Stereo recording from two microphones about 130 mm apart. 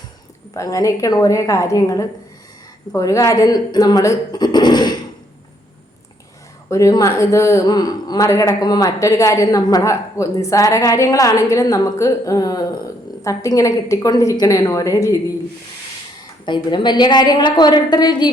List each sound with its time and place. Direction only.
0.5 s a man's voice: 25° left (ahead or behind)
6.7 s a man's voice: 25° left (ahead or behind)
16.5 s speech: 35° left (ahead or behind)